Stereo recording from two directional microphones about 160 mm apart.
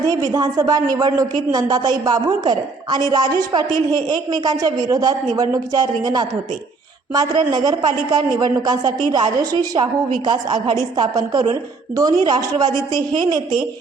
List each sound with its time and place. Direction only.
0.1 s a woman's voice: 20° right (ahead or behind)